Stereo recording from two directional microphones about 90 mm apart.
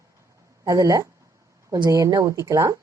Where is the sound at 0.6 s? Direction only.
40° right (ahead or behind).